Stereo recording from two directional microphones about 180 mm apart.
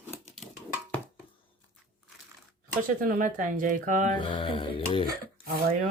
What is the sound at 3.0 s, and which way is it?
Speech, 45° right (ahead or behind).